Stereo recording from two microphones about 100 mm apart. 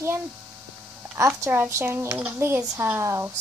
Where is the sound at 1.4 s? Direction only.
25° right (ahead or behind).